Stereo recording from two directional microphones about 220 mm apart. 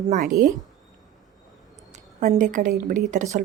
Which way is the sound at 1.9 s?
35° right (ahead or behind).